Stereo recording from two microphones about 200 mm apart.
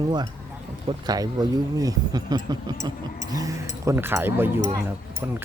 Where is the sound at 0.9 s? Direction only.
20° right (ahead or behind).